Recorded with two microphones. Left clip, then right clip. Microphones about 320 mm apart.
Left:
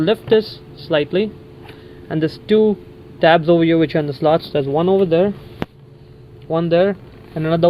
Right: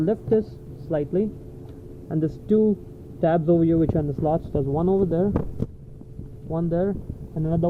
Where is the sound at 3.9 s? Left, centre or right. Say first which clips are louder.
Left 8 dB; left.